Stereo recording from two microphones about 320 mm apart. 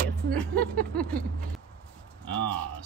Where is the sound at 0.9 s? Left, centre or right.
Centre.